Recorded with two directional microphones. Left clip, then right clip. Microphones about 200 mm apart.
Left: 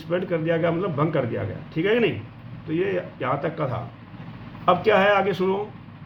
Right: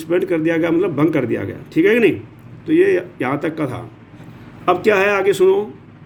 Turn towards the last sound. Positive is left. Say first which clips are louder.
# right 6 dB
turn(degrees=-40)  # may be behind; listen again after turning